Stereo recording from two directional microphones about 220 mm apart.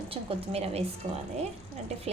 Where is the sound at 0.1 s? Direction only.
25° right (ahead or behind).